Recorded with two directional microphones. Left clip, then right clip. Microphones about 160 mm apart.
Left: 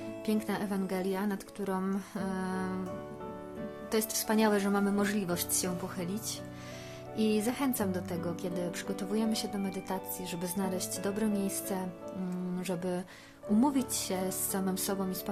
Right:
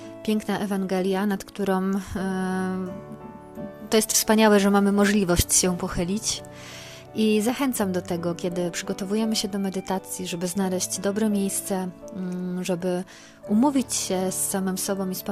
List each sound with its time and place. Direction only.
0.3 s a woman's voice: 45° right (ahead or behind)
3.8 s a woman's voice: 50° right (ahead or behind)